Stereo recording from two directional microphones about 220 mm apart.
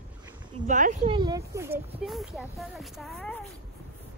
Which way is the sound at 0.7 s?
35° right (ahead or behind).